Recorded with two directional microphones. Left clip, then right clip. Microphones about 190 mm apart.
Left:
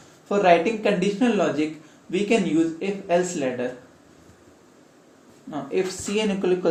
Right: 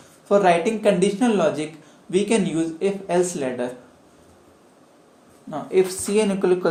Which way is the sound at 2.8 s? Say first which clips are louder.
Right 2 dB; 45° right (ahead or behind).